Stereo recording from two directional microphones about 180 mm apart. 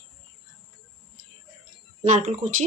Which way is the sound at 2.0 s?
45° right (ahead or behind).